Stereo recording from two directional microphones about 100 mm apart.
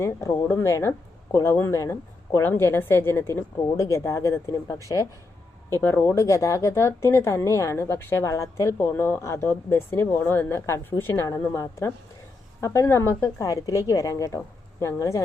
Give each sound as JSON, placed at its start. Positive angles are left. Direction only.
{"t": 0.0, "sound": "speech", "side_deg": 25}
{"t": 5.7, "sound": "a woman's voice", "side_deg": 20}